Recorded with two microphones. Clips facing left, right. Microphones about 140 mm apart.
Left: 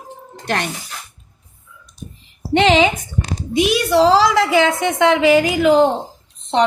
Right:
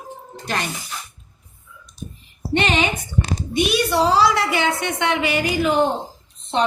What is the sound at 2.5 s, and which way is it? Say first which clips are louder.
A woman's voice: left 7 dB; 90° left.